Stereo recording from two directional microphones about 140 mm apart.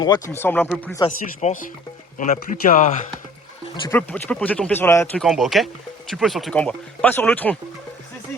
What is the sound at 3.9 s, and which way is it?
Speech, 10° left (ahead or behind).